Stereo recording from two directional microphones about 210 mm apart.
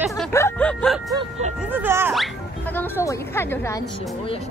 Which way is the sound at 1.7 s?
10° right (ahead or behind).